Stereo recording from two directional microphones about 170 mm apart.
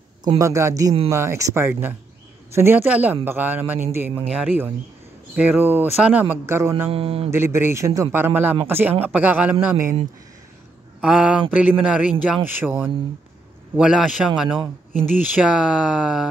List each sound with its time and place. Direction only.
0.4 s speech: 15° right (ahead or behind)
6.9 s speech: 35° right (ahead or behind)
7.2 s speech: 15° right (ahead or behind)
11.0 s speech: 5° right (ahead or behind)